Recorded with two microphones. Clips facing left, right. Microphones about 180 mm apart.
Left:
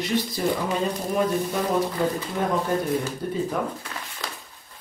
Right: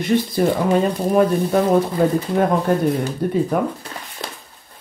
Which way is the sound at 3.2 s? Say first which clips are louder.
Right 7 dB; 60° right (ahead or behind).